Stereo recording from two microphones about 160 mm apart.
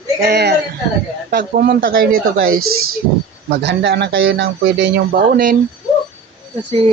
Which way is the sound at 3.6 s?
90° right.